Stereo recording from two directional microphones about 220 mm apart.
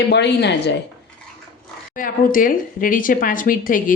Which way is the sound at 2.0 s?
40° left (ahead or behind).